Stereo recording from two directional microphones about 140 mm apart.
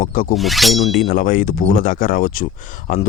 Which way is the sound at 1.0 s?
75° left (ahead or behind).